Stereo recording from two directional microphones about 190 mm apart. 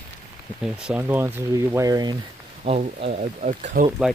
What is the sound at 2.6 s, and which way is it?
Speech, 30° right (ahead or behind).